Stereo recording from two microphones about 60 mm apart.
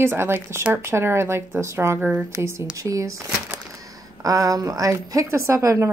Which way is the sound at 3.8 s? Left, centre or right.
Right.